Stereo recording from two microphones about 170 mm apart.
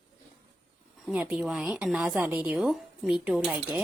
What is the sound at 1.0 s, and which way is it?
A woman's voice, 5° right (ahead or behind).